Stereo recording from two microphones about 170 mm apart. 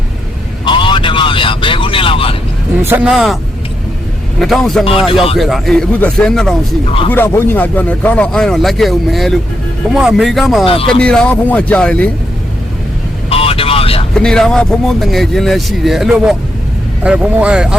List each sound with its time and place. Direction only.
0.6 s vehicle: 30° left (ahead or behind)
2.8 s speech: 10° right (ahead or behind)
4.4 s speech: centre (ahead or behind)
4.9 s speech: 30° left (ahead or behind)
5.4 s speech: centre (ahead or behind)
10.7 s speech: 35° left (ahead or behind)
11.0 s speech: 5° left (ahead or behind)
13.3 s vehicle: 35° left (ahead or behind)
14.1 s speech: 5° left (ahead or behind)